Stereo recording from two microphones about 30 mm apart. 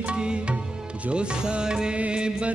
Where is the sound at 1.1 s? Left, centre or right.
Right.